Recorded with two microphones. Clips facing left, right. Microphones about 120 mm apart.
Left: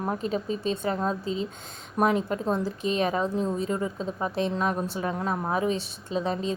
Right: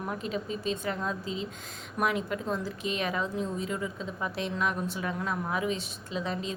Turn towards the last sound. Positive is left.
turn(degrees=35)  # may be behind; listen again after turning